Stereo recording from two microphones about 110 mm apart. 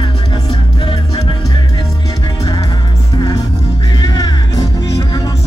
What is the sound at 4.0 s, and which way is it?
Music, 40° left (ahead or behind).